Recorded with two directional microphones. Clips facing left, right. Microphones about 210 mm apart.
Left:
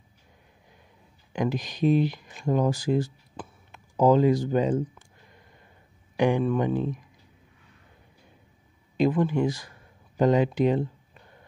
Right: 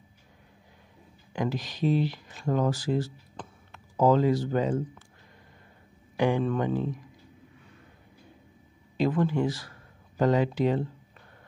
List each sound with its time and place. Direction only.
1.3 s speech: 15° left (ahead or behind)
6.1 s speech: 15° left (ahead or behind)
8.9 s speech: 15° left (ahead or behind)